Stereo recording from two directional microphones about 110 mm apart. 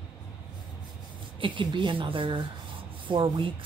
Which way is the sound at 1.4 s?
45° right (ahead or behind).